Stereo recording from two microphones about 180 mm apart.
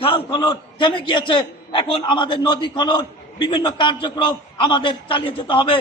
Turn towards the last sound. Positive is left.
turn(degrees=25)  # may be behind; listen again after turning